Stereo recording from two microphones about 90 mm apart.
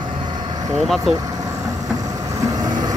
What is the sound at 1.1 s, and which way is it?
Vehicle, 40° right (ahead or behind).